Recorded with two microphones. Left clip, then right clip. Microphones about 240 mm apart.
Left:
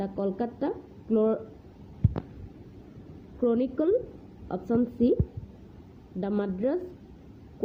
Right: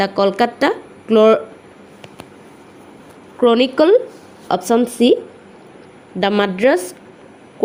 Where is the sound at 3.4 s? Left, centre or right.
Right.